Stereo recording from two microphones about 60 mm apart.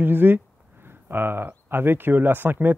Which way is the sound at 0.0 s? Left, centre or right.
Right.